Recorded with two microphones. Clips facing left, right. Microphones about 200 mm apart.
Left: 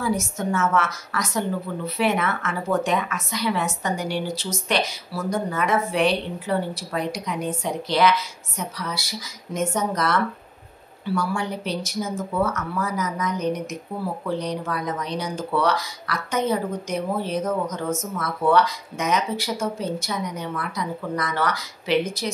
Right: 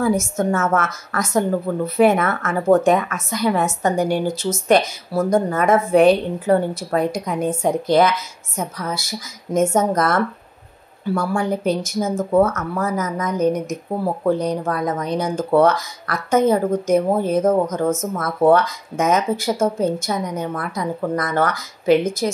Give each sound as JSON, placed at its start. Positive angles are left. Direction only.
{"t": 0.0, "sound": "speech", "side_deg": -50}